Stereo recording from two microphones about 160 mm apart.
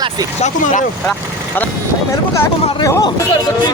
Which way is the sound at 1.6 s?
10° left (ahead or behind).